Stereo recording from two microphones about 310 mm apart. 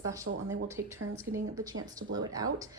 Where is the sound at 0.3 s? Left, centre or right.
Right.